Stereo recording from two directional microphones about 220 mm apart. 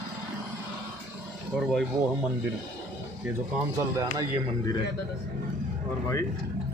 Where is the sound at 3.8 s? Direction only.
15° right (ahead or behind).